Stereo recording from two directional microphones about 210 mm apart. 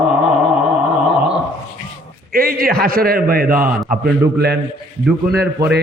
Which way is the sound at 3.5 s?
10° right (ahead or behind).